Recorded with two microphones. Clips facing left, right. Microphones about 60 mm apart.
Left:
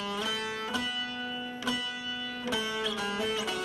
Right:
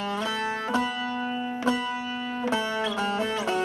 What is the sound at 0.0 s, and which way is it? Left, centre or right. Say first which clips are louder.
Music: right 5 dB; right.